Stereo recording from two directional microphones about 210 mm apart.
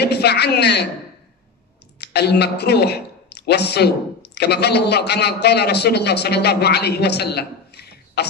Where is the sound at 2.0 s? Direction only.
50° left (ahead or behind).